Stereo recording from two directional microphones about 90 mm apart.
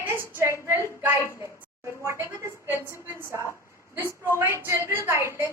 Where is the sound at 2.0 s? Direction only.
30° right (ahead or behind).